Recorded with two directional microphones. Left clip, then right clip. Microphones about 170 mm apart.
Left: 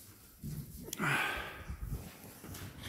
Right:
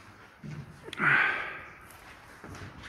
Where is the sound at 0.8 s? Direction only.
20° left (ahead or behind).